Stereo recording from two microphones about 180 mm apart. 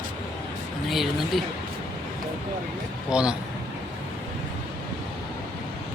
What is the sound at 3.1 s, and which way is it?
Speech, 5° right (ahead or behind).